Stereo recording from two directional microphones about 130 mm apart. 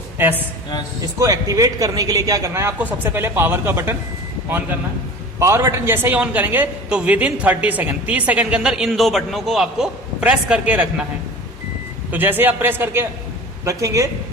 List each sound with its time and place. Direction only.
0.2 s a man's voice: 15° right (ahead or behind)
1.2 s a man's voice: 25° right (ahead or behind)
5.4 s a man's voice: 25° right (ahead or behind)
12.1 s a man's voice: 15° right (ahead or behind)